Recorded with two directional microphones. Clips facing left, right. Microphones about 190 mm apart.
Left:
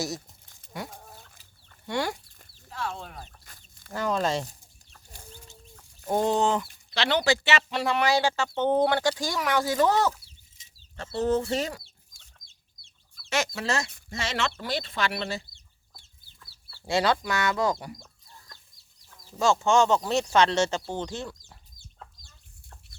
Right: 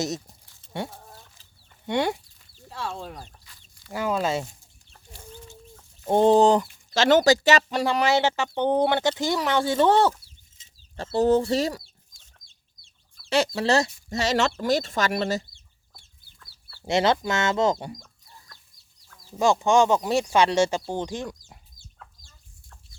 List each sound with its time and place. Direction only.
1.9 s speech: 20° right (ahead or behind)
3.4 s chicken: 50° left (ahead or behind)
3.9 s speech: 10° right (ahead or behind)
6.1 s speech: 30° right (ahead or behind)
8.0 s speech: 20° right (ahead or behind)
13.3 s speech: 30° right (ahead or behind)
16.8 s speech: 20° right (ahead or behind)
19.4 s speech: 15° right (ahead or behind)
22.2 s chicken: 5° right (ahead or behind)